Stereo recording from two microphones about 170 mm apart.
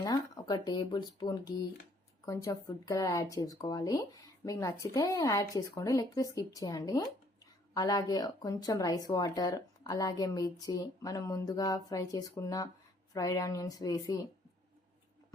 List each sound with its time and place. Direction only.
0.0 s speech: 25° left (ahead or behind)